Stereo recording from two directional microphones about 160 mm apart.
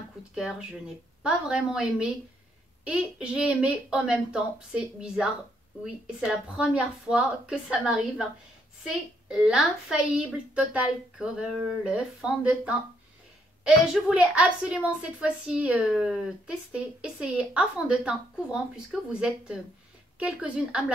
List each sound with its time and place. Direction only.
0.3 s a woman's voice: 5° right (ahead or behind)